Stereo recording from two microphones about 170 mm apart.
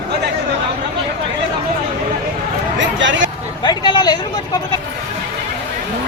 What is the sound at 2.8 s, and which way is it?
Vehicle, 90° right.